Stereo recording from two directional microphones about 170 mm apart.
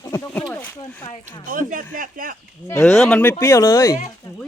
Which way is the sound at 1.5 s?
55° right (ahead or behind).